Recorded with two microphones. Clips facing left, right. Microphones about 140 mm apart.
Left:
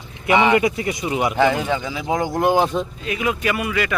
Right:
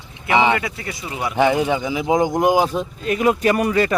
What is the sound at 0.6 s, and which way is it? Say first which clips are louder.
Speech: left 8 dB; 20° left (ahead or behind).